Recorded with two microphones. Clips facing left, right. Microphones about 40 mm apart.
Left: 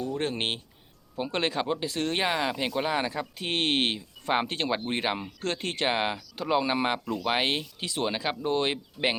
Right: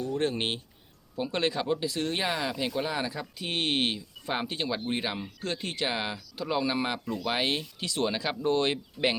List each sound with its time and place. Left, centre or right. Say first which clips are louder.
0.0 s speech: right 1 dB; left
4.4 s speech: left 2 dB; left
4.9 s speech: left 2 dB; left
8.0 s speech: right 1 dB; centre